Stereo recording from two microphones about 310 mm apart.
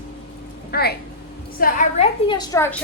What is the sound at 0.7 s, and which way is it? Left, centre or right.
A woman's voice, left.